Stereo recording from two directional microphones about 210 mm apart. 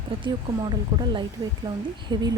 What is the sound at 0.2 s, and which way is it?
A woman's voice, 20° right (ahead or behind).